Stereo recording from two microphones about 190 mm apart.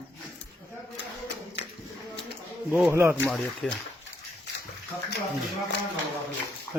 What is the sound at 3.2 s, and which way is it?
Speech, 5° left (ahead or behind).